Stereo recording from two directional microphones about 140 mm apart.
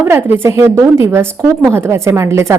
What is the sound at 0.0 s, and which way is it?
A woman's voice, 15° right (ahead or behind).